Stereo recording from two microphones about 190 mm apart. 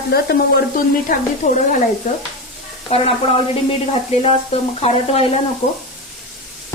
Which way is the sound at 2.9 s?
30° left (ahead or behind).